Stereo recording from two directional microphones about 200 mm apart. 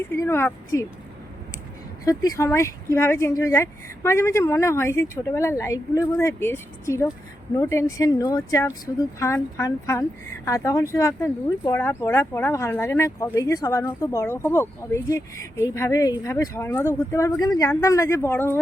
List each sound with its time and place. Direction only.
0.2 s speech: 10° left (ahead or behind)
2.0 s speech: 15° left (ahead or behind)